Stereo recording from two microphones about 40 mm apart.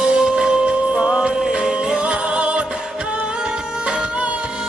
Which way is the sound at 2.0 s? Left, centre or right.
Right.